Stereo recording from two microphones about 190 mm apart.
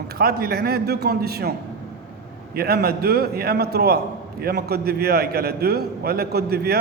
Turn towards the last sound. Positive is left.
turn(degrees=-55)  # may be behind; listen again after turning